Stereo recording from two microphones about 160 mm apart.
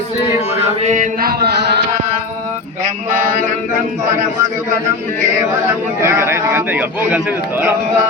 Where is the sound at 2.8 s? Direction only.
55° right (ahead or behind).